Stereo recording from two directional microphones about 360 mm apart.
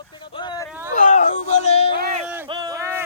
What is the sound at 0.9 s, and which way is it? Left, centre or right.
Music, left.